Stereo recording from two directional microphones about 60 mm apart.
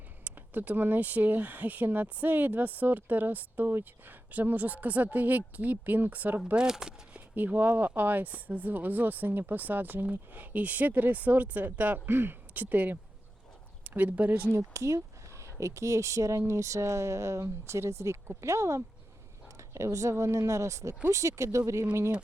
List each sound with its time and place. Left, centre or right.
0.3 s speech: right
6.6 s speech: centre
7.3 s speech: right
14.7 s speech: right